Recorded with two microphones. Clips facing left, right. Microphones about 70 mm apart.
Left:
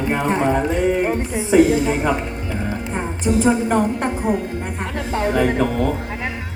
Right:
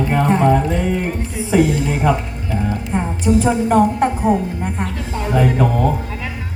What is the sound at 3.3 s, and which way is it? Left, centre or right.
Speech, centre.